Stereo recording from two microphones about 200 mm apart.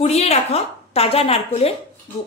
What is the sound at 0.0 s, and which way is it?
A woman's voice, 30° left (ahead or behind).